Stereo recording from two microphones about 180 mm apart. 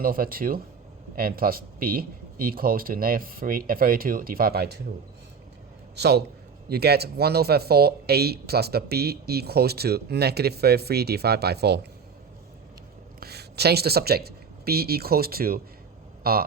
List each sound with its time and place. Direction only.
0.0 s speech: 55° right (ahead or behind)
6.0 s speech: 65° right (ahead or behind)
13.1 s speech: 60° right (ahead or behind)